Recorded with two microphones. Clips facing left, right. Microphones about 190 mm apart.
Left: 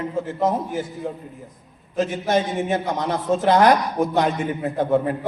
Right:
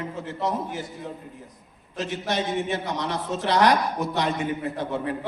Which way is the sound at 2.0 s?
50° left (ahead or behind).